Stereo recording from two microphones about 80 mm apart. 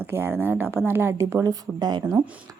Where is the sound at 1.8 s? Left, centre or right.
Right.